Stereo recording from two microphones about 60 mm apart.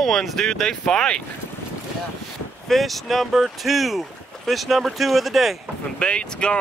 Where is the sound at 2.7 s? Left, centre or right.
Centre.